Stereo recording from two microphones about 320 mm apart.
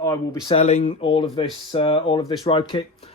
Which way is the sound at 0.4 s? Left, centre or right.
Centre.